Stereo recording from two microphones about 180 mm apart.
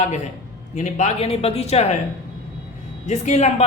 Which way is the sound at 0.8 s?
40° left (ahead or behind).